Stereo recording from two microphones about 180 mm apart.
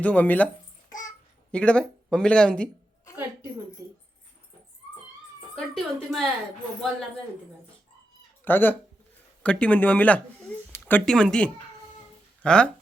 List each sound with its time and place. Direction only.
0.0 s speech: 10° left (ahead or behind)
1.5 s speech: 5° left (ahead or behind)
3.8 s a sound: 20° right (ahead or behind)
5.5 s speech: centre (ahead or behind)
8.4 s speech: 10° left (ahead or behind)